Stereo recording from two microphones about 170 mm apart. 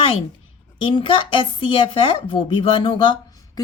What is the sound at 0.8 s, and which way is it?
Speech, 30° left (ahead or behind).